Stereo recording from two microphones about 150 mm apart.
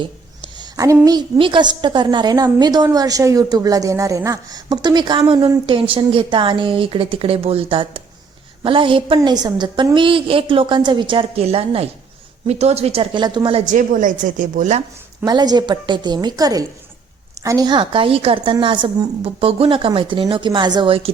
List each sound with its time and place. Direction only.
0.5 s a sound: 25° right (ahead or behind)
1.0 s a woman's voice: 30° right (ahead or behind)
13.7 s a woman's voice: 60° right (ahead or behind)
15.2 s a woman's voice: 25° right (ahead or behind)